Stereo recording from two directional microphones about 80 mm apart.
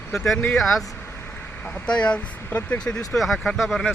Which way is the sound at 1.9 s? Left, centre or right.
Centre.